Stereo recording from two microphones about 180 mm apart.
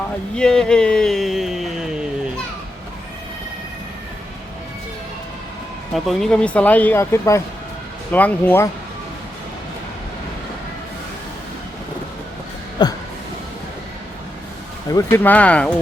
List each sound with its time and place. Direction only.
0.3 s speech: 5° left (ahead or behind)
5.9 s speech: centre (ahead or behind)
12.8 s a sound: 25° left (ahead or behind)
14.8 s speech: 15° left (ahead or behind)